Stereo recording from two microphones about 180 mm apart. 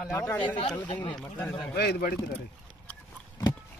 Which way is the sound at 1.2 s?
5° left (ahead or behind).